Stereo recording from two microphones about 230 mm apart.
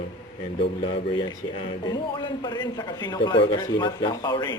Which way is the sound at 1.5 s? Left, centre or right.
Centre.